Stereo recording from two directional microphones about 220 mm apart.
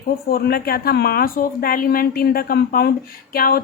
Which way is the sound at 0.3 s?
45° left (ahead or behind).